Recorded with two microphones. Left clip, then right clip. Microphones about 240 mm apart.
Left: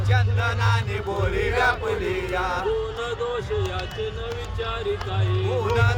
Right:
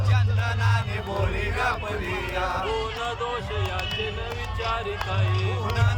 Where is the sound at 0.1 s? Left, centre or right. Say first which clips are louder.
Left 6 dB; centre.